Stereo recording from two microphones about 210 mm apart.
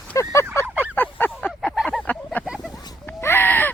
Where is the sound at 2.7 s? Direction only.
20° left (ahead or behind).